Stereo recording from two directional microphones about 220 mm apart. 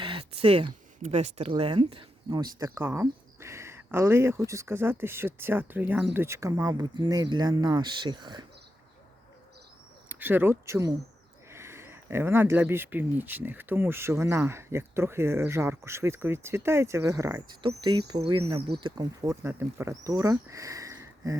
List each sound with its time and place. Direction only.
0.0 s a sound: 25° right (ahead or behind)
1.1 s speech: 30° right (ahead or behind)
10.1 s speech: 10° right (ahead or behind)